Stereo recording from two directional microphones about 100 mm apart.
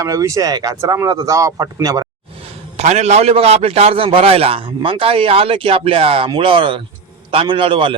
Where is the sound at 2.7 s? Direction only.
90° right; by 6.3 s 70° right (ahead or behind).